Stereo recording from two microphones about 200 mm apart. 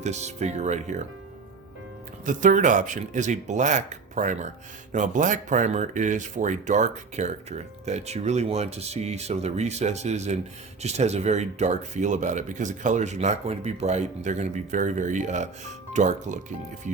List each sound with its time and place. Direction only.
0.0 s speech: 35° right (ahead or behind)
2.2 s speech: 40° right (ahead or behind)